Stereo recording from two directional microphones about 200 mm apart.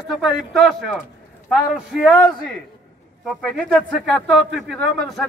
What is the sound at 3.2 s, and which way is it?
A man's voice, centre (ahead or behind).